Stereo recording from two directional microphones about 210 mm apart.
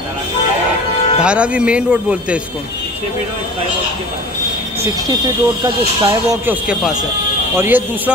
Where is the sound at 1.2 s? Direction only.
5° right (ahead or behind).